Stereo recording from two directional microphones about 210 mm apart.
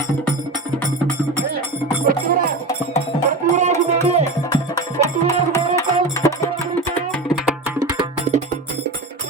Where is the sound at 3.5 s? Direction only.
35° right (ahead or behind).